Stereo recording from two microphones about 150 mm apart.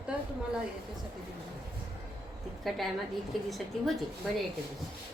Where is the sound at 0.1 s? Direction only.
10° right (ahead or behind).